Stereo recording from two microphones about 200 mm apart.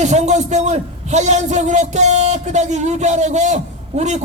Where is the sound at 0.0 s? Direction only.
35° right (ahead or behind).